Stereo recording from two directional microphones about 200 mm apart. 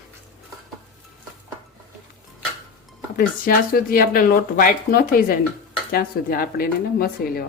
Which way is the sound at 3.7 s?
45° left (ahead or behind).